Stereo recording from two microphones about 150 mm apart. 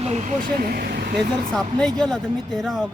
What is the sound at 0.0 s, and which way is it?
Speech, 50° right (ahead or behind).